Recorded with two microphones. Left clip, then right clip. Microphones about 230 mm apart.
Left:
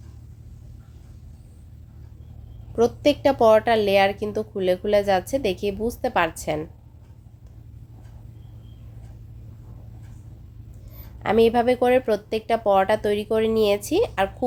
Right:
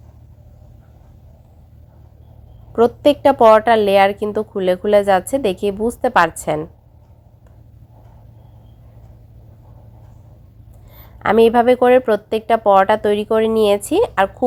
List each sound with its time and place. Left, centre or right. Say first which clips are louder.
2.7 s a woman's voice: right 6 dB; centre
11.2 s speech: right 6 dB; centre